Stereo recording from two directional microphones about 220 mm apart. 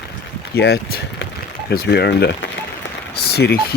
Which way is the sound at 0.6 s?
45° left (ahead or behind).